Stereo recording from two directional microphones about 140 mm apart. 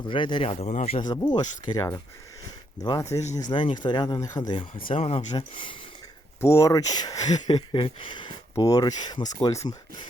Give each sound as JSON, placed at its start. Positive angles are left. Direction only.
{"t": 0.1, "sound": "speech", "side_deg": 35}
{"t": 0.9, "sound": "speech", "side_deg": 30}
{"t": 4.9, "sound": "speech", "side_deg": 45}
{"t": 5.4, "sound": "speech", "side_deg": 35}
{"t": 6.4, "sound": "speech", "side_deg": 20}